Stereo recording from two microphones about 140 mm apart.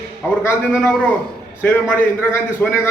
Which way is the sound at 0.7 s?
5° left (ahead or behind).